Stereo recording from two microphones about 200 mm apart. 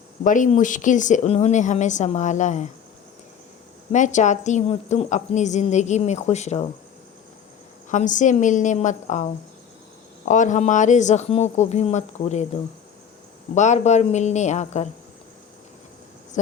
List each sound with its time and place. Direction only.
0.3 s a woman's voice: 40° left (ahead or behind)
3.9 s a woman's voice: 35° left (ahead or behind)
7.9 s a woman's voice: 40° left (ahead or behind)
13.5 s a woman's voice: 35° left (ahead or behind)